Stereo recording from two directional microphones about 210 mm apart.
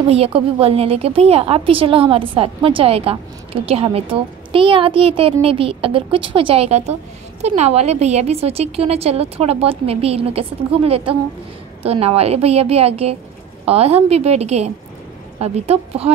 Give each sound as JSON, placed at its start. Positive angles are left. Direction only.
{"t": 0.1, "sound": "a woman's voice", "side_deg": -25}